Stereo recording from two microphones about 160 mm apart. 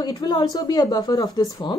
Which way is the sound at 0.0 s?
25° left (ahead or behind).